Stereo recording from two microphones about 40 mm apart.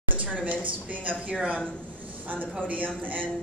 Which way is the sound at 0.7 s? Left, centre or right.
Right.